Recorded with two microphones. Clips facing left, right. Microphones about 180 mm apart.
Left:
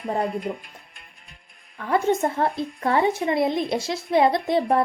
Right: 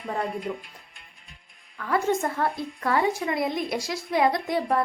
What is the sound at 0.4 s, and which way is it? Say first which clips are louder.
Speech: left 2 dB; 55° left (ahead or behind).